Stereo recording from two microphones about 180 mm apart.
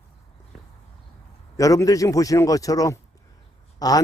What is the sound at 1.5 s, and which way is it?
A man's voice, 20° left (ahead or behind).